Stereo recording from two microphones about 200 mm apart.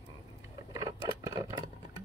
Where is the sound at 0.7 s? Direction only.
15° right (ahead or behind).